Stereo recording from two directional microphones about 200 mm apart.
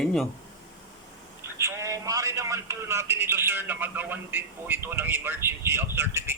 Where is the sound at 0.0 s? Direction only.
5° left (ahead or behind).